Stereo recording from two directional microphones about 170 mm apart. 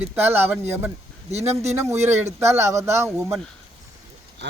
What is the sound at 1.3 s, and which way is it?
Speech, 40° right (ahead or behind).